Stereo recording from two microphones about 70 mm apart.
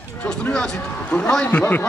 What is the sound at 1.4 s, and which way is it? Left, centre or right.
Speech, left.